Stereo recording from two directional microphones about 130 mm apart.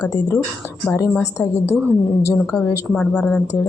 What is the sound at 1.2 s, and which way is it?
Speech, 20° left (ahead or behind).